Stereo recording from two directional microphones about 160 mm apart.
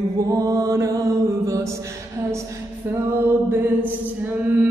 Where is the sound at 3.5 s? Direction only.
15° right (ahead or behind).